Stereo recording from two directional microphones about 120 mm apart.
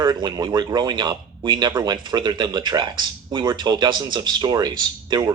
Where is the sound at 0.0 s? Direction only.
35° right (ahead or behind).